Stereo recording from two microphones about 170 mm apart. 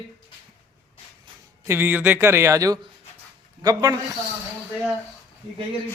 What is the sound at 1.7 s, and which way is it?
Speech, 15° right (ahead or behind).